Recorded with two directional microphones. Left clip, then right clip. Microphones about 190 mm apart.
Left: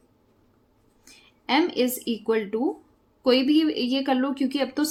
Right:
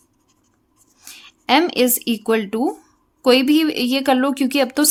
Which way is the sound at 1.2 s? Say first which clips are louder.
Right 7 dB; 40° right (ahead or behind).